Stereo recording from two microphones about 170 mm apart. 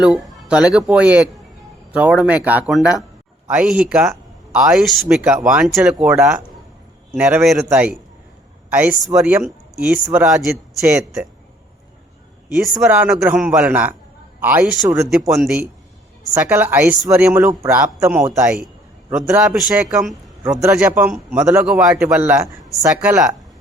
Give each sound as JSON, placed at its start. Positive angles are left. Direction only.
{"t": 0.0, "sound": "speech", "side_deg": -5}
{"t": 6.1, "sound": "speech", "side_deg": -15}
{"t": 12.5, "sound": "speech", "side_deg": 0}
{"t": 15.4, "sound": "speech", "side_deg": -5}
{"t": 20.4, "sound": "speech", "side_deg": -15}